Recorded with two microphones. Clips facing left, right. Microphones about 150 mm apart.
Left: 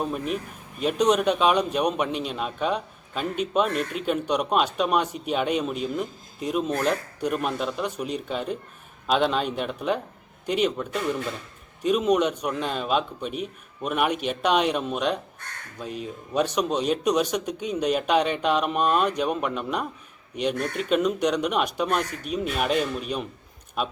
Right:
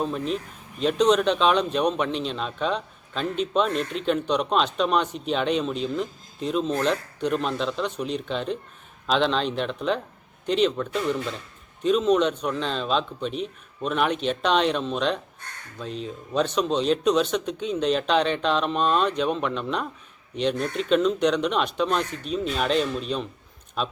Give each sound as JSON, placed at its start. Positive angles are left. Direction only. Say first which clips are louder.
{"t": 0.0, "sound": "a man's voice", "louder": "right 1 dB", "side_deg": 10}